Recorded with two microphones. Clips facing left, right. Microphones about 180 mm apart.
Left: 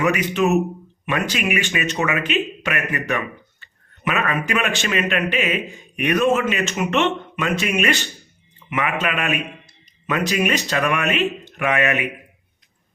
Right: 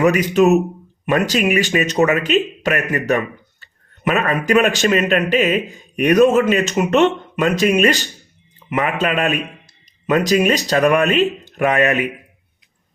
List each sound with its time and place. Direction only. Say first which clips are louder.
0.0 s a man's voice: right 6 dB; 35° right (ahead or behind)